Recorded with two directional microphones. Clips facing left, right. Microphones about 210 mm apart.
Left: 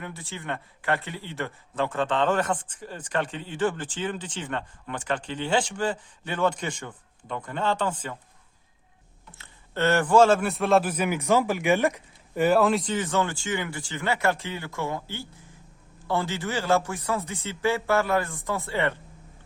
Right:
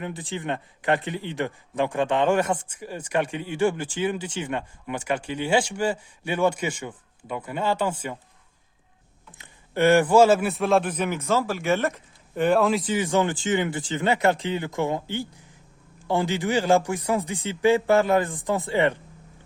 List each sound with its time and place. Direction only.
0.0 s speech: 15° right (ahead or behind)
9.4 s speech: 10° right (ahead or behind)